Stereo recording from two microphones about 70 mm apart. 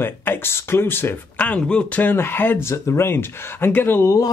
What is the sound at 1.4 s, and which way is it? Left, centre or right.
Speech, centre.